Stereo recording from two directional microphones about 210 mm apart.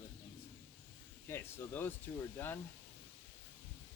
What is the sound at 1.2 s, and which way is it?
Speech, 10° left (ahead or behind).